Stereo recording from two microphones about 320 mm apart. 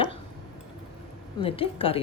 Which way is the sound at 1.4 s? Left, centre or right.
Centre.